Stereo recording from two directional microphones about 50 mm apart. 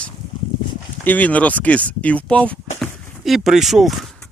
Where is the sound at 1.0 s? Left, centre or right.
Left.